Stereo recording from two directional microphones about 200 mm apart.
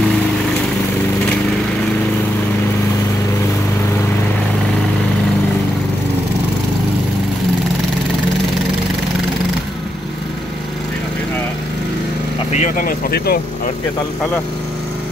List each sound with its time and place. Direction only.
12.5 s vehicle: 40° left (ahead or behind)